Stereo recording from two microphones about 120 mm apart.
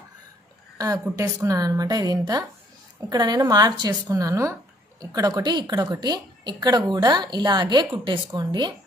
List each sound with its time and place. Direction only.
0.7 s a woman's voice: 30° right (ahead or behind)